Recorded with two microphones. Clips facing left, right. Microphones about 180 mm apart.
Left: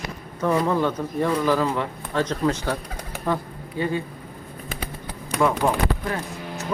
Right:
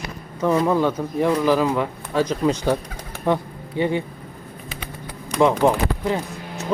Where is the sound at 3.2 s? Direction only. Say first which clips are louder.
Right 5 dB; 20° right (ahead or behind).